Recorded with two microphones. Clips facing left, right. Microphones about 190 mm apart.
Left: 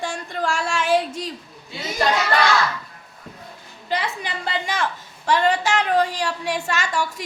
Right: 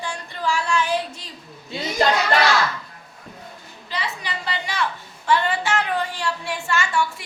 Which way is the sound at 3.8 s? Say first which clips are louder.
Left 4 dB; 50° left (ahead or behind).